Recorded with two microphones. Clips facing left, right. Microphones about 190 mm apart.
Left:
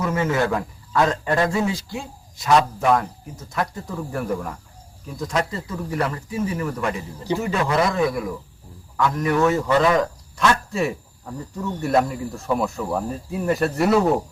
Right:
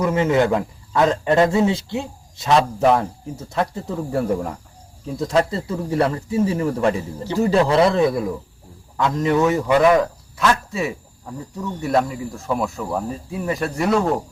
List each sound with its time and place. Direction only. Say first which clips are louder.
0.0 s a man's voice: right 4 dB; 20° right (ahead or behind)
10.3 s speech: even; centre (ahead or behind)